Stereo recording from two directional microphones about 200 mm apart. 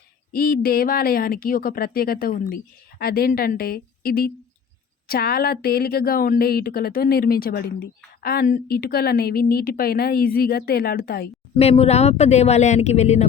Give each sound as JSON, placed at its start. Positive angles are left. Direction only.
{"t": 0.3, "sound": "a woman's voice", "side_deg": 50}
{"t": 11.5, "sound": "speech", "side_deg": 30}